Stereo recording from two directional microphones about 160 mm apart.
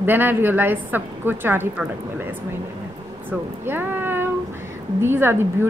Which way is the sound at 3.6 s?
15° right (ahead or behind).